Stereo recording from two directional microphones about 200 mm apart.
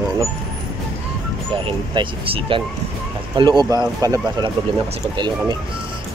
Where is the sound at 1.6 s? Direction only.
25° right (ahead or behind).